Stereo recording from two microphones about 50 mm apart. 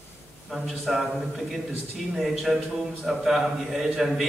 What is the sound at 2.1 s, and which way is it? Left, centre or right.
A man's voice, centre.